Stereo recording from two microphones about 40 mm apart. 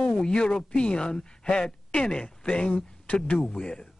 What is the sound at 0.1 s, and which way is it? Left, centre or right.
A man's voice, left.